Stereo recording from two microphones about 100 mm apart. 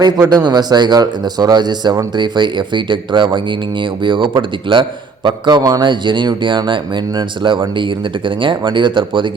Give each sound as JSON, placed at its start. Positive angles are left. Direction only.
{"t": 0.3, "sound": "speech", "side_deg": -45}